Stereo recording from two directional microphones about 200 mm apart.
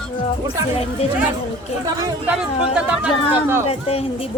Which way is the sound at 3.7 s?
30° left (ahead or behind).